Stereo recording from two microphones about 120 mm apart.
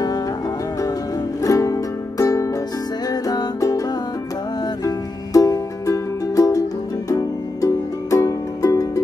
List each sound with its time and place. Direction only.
1.4 s music: 25° left (ahead or behind)
4.8 s music: 30° left (ahead or behind)